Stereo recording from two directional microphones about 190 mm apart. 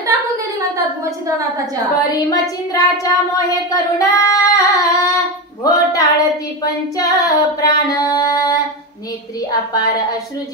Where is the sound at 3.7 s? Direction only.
20° left (ahead or behind).